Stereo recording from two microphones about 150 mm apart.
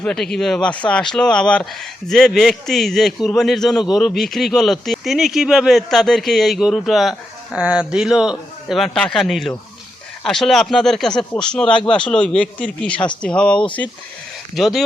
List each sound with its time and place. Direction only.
0.0 s speech: 5° left (ahead or behind)